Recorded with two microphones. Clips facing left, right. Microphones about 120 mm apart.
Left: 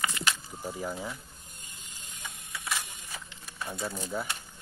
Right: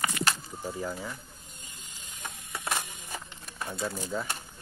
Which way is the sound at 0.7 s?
10° left (ahead or behind).